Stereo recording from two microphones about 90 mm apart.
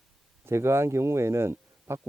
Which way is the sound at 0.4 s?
30° right (ahead or behind).